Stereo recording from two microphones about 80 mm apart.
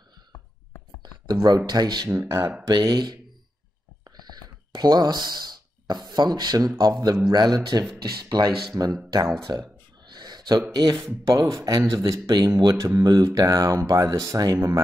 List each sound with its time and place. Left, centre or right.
1.2 s speech: right
2.1 s speech: right
2.8 s speech: right
4.0 s a sound: right
6.8 s speech: right
9.5 s a sound: right
10.7 s speech: right
11.2 s speech: right
11.5 s speech: right
12.7 s speech: right
13.3 s speech: right